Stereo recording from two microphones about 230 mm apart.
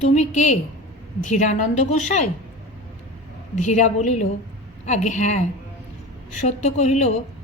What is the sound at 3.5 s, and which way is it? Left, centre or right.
A woman's voice, left.